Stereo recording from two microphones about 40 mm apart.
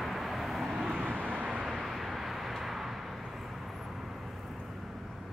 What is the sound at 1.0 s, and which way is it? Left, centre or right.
Vehicle, right.